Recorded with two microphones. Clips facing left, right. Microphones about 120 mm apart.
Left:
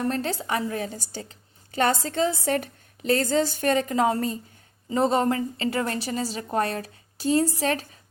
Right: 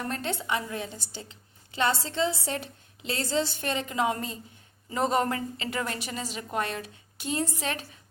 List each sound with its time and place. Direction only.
0.1 s a woman's voice: 35° left (ahead or behind)
4.9 s a woman's voice: 30° left (ahead or behind)